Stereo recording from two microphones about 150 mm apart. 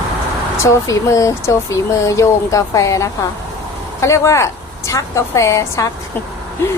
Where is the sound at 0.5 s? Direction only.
20° left (ahead or behind).